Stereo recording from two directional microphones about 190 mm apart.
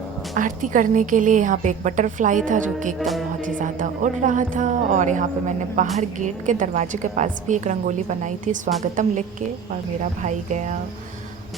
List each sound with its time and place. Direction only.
0.3 s a woman's voice: 45° right (ahead or behind)
3.0 s music: centre (ahead or behind)
3.4 s a woman's voice: 45° right (ahead or behind)
10.0 s a woman's voice: 40° right (ahead or behind)